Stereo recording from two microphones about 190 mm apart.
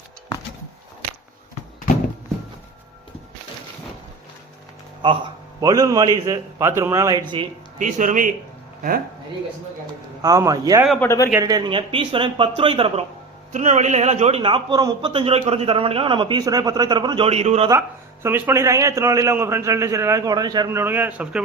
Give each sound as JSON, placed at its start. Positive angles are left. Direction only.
{"t": 5.0, "sound": "speech", "side_deg": -25}
{"t": 7.8, "sound": "speech", "side_deg": -40}
{"t": 10.2, "sound": "speech", "side_deg": -20}
{"t": 10.8, "sound": "speech", "side_deg": 0}
{"t": 11.3, "sound": "speech", "side_deg": -15}
{"t": 17.7, "sound": "a man's voice", "side_deg": -15}